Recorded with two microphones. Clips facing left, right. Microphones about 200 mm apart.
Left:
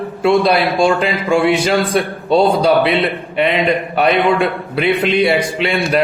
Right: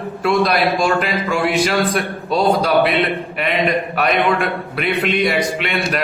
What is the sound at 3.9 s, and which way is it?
Speech, 30° left (ahead or behind).